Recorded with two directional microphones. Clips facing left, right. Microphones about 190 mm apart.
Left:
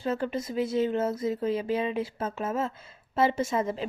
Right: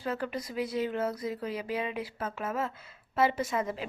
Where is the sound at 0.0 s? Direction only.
25° left (ahead or behind).